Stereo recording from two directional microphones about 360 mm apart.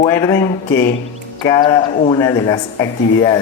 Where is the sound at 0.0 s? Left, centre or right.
Centre.